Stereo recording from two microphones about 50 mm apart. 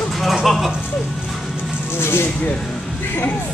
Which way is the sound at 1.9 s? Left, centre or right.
Left.